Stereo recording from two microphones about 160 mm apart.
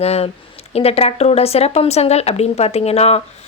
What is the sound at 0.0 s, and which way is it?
Speech, 40° left (ahead or behind).